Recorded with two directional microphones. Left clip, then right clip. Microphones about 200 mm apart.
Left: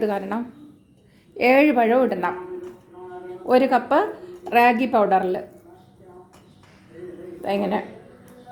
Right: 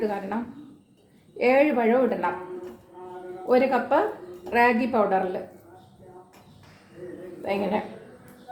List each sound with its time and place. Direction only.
0.0 s a woman's voice: 55° left (ahead or behind)
1.4 s a woman's voice: 60° left (ahead or behind)
3.5 s a woman's voice: 55° left (ahead or behind)
7.4 s a woman's voice: 50° left (ahead or behind)